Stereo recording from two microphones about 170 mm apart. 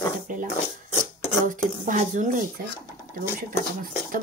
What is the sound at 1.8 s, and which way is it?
Speech, 50° right (ahead or behind).